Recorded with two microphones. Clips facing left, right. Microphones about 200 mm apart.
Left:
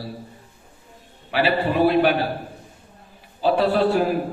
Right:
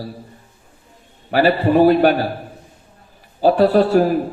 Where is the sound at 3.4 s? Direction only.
45° right (ahead or behind).